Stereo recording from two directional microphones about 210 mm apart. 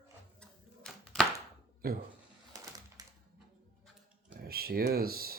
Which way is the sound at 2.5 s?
20° right (ahead or behind).